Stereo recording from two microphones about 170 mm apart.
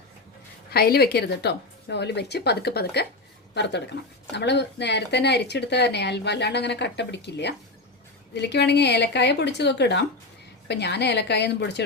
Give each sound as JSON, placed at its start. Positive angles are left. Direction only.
{"t": 0.7, "sound": "a woman's voice", "side_deg": 65}
{"t": 3.5, "sound": "speech", "side_deg": 90}